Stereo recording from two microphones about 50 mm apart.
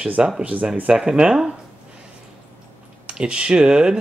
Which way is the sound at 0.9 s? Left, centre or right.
Centre.